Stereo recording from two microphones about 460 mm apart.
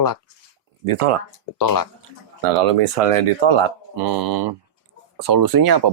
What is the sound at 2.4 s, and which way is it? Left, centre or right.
Speech, right.